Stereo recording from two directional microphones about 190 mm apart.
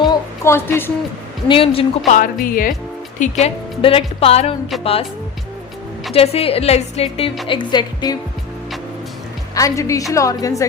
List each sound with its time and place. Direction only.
0.0 s a sound: 15° left (ahead or behind)
1.5 s speech: 30° left (ahead or behind)
2.0 s a woman's voice: 40° left (ahead or behind)
3.4 s a woman's voice: 30° left (ahead or behind)
6.1 s a woman's voice: 30° left (ahead or behind)
9.6 s a woman's voice: 15° left (ahead or behind)